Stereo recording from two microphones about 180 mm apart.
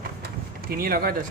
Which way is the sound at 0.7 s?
55° right (ahead or behind).